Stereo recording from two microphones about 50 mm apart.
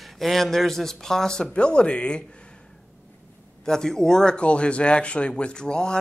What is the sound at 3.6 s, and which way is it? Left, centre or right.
Speech, centre.